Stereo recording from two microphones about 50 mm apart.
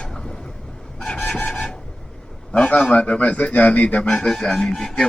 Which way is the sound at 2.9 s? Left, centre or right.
Left.